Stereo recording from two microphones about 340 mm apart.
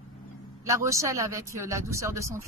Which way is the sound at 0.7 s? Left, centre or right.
Centre.